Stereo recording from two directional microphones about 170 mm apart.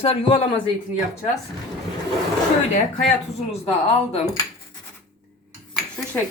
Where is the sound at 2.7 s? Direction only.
40° left (ahead or behind).